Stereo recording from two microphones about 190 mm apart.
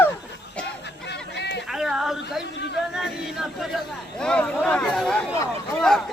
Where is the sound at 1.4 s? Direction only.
65° left (ahead or behind).